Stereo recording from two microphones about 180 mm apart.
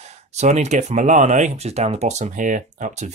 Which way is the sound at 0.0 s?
40° right (ahead or behind).